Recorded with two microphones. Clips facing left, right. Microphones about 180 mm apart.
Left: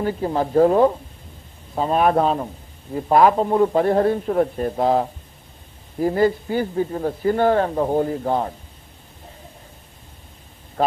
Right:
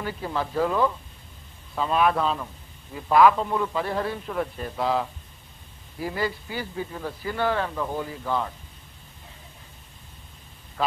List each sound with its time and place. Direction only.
0.0 s a man's voice: 40° left (ahead or behind)